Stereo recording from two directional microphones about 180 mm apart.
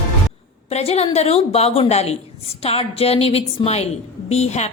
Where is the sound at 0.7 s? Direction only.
35° left (ahead or behind).